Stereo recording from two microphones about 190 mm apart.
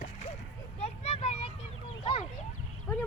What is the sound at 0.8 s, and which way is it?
Vehicle, 30° left (ahead or behind).